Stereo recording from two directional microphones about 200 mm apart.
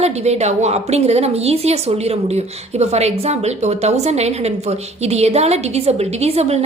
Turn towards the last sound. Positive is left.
turn(degrees=-30)  # may be behind; listen again after turning